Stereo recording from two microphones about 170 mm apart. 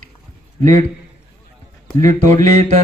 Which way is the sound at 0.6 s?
50° right (ahead or behind).